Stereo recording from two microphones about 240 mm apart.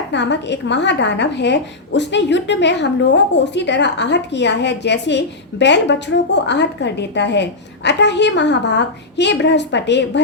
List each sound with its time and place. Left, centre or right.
0.1 s a woman's voice: left